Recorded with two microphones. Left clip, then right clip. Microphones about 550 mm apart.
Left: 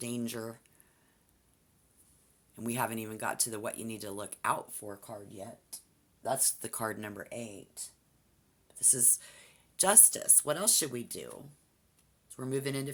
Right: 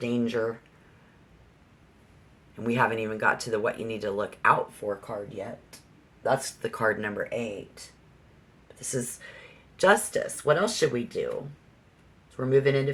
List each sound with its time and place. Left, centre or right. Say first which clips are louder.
0.0 s speech: right 11 dB; left
2.6 s speech: right 10 dB; left
6.2 s speech: right 8 dB; left
8.9 s speech: right 1 dB; left
12.4 s speech: right 13 dB; left